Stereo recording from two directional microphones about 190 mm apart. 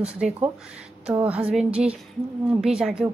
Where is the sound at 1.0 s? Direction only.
5° right (ahead or behind).